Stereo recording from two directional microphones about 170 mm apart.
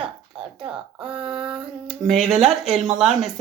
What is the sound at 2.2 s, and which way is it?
Child singing, centre (ahead or behind).